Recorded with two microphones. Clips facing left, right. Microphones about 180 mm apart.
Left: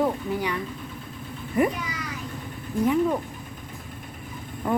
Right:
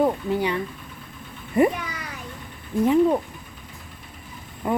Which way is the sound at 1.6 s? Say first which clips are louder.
Right 4 dB; 25° right (ahead or behind).